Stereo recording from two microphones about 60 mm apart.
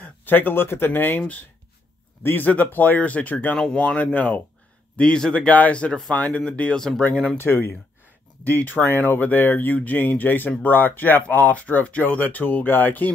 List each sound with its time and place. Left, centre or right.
0.0 s speech: left
3.5 s speech: centre
7.3 s speech: left
8.5 s speech: left